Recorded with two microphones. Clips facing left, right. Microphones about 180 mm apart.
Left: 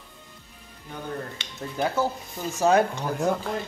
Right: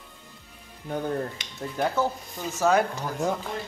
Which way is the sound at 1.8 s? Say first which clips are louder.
Even; 5° left (ahead or behind).